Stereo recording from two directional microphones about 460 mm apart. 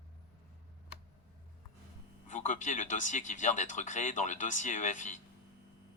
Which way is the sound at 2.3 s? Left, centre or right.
Centre.